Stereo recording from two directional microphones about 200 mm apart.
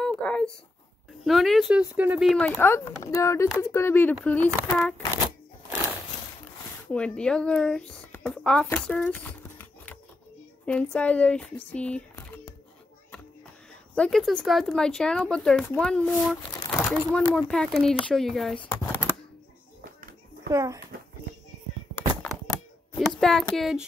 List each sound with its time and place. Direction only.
0.0 s a sound: 5° left (ahead or behind)
1.2 s speech: centre (ahead or behind)
6.9 s speech: 5° left (ahead or behind)
13.9 s speech: 5° left (ahead or behind)
18.7 s typewriter: 10° left (ahead or behind)
20.5 s a child's voice: 15° right (ahead or behind)
22.9 s speech: centre (ahead or behind)